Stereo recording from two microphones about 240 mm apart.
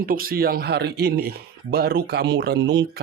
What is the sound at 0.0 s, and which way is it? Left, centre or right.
Speech, right.